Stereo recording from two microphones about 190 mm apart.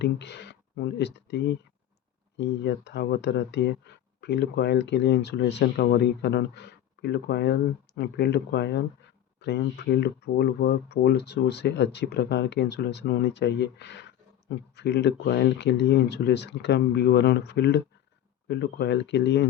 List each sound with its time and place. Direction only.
0.0 s speech: 65° left (ahead or behind)